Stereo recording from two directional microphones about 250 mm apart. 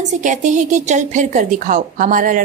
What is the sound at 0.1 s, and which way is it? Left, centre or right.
A woman's voice, right.